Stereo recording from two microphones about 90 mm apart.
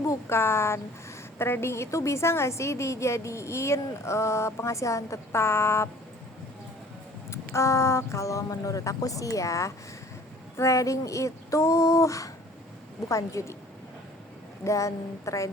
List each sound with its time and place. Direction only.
0.0 s a woman's voice: 30° left (ahead or behind)
7.3 s a woman's voice: 35° left (ahead or behind)
14.6 s a woman's voice: 35° left (ahead or behind)